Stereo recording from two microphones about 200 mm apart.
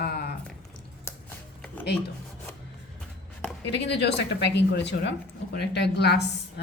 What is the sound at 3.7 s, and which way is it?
Speech, 55° left (ahead or behind).